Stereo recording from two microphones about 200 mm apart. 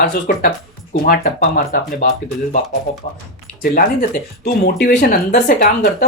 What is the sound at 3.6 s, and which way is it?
Speech, 45° left (ahead or behind).